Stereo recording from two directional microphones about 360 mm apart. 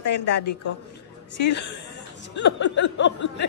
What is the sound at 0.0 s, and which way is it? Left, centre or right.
Speech, left.